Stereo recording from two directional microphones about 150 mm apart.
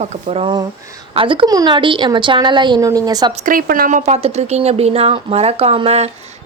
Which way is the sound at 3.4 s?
70° right (ahead or behind).